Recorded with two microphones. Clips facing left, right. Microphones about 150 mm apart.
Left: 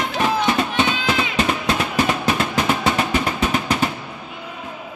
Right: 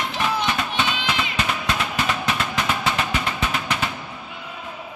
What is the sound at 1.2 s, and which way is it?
Cat, 30° left (ahead or behind).